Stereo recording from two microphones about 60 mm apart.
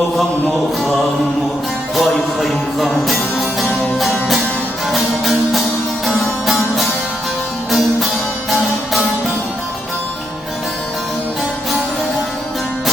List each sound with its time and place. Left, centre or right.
2.0 s music: centre